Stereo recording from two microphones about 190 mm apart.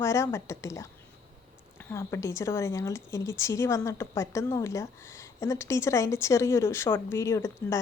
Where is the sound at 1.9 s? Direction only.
15° left (ahead or behind).